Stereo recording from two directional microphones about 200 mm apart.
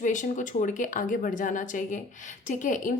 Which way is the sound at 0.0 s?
40° left (ahead or behind).